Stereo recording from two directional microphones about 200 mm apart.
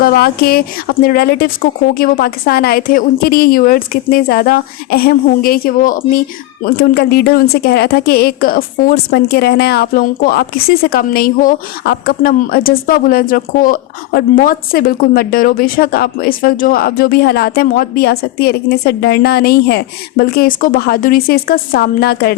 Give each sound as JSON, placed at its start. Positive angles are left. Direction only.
{"t": 0.0, "sound": "a woman's voice", "side_deg": 50}